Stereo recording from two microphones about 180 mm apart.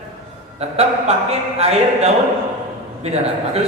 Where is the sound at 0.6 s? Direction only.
35° right (ahead or behind).